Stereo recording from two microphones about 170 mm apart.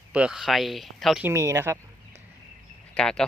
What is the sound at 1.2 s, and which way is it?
Speech, 15° right (ahead or behind).